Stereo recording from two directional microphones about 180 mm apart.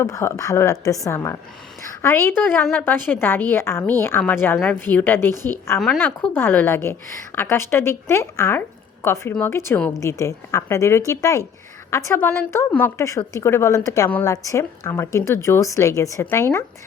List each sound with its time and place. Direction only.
0.0 s a woman's voice: 15° left (ahead or behind)